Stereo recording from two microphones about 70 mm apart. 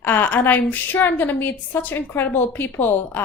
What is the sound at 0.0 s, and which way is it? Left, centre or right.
A woman's voice, left.